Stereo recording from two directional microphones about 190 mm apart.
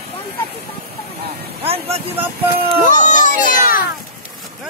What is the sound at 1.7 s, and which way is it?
Speech, 30° right (ahead or behind).